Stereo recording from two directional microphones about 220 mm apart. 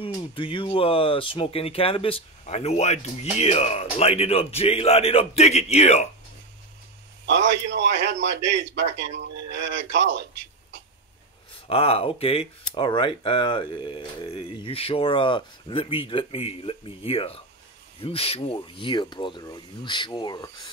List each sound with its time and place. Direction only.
0.0 s speech: 25° left (ahead or behind)
7.2 s a man's voice: 55° right (ahead or behind)
11.6 s speech: 25° left (ahead or behind)